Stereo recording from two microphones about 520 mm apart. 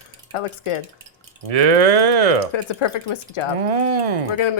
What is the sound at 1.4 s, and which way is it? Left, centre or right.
Speech, right.